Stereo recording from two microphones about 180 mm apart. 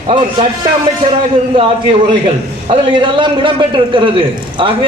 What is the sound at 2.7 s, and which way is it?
A man's voice, 25° right (ahead or behind).